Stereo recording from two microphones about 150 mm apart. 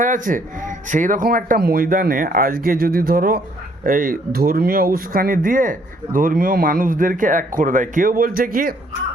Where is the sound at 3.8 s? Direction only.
70° right (ahead or behind).